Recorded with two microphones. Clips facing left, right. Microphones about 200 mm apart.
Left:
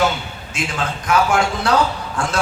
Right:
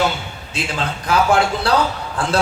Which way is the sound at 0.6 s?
35° right (ahead or behind).